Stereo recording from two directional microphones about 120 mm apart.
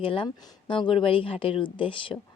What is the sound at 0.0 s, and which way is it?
Speech, 50° left (ahead or behind).